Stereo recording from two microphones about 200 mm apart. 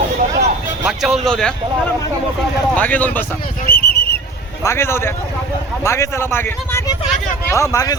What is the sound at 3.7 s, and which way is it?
Speech, 50° left (ahead or behind).